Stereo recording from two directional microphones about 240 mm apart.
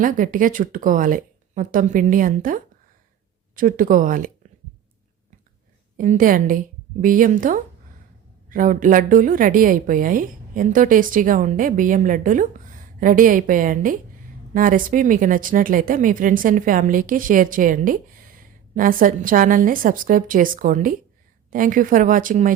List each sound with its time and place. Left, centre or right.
0.0 s a woman's voice: right
6.0 s a woman's voice: right